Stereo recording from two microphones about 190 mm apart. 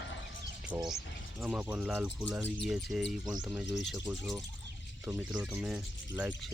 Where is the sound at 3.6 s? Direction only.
70° left (ahead or behind).